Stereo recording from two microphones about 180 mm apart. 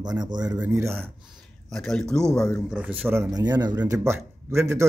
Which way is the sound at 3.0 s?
15° right (ahead or behind).